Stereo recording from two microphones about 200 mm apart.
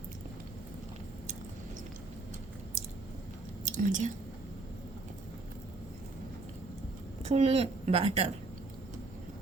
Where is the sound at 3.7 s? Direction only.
40° right (ahead or behind).